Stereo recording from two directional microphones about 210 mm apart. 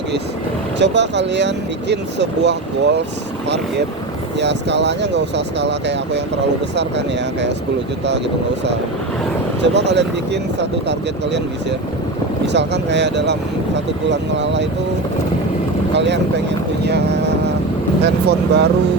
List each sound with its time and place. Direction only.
0.8 s speech: 55° right (ahead or behind)
4.4 s speech: 55° right (ahead or behind)
9.6 s speech: 55° right (ahead or behind)
12.5 s speech: 55° right (ahead or behind)
15.9 s speech: 55° right (ahead or behind)
16.8 s vehicle: 50° right (ahead or behind)
18.0 s speech: 50° right (ahead or behind)